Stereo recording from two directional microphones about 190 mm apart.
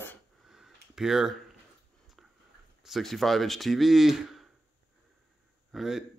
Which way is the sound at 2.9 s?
Centre (ahead or behind).